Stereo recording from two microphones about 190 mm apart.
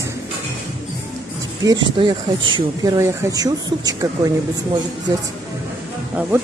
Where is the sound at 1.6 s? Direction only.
20° right (ahead or behind).